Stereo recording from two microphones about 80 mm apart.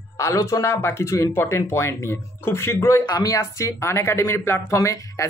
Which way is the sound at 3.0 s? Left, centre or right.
Left.